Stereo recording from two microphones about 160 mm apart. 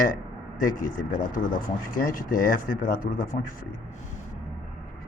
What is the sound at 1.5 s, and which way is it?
Speech, 60° left (ahead or behind).